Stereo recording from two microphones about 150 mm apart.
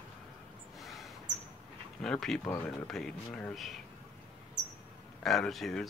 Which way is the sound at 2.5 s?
15° left (ahead or behind).